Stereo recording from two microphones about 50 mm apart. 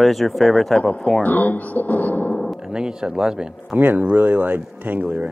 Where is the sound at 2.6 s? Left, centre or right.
Centre.